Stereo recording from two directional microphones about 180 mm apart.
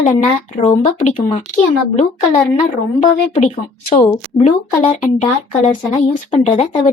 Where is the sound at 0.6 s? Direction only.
40° left (ahead or behind).